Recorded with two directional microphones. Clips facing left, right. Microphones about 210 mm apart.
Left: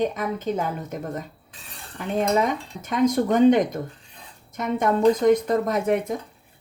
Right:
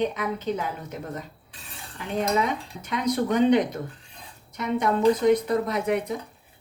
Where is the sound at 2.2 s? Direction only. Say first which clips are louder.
Left 3 dB; 45° left (ahead or behind).